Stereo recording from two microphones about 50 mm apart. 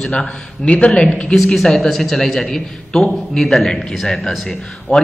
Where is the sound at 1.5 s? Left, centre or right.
Centre.